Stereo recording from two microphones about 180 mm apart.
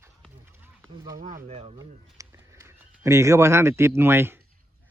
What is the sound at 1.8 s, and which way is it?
A man's voice, 15° right (ahead or behind).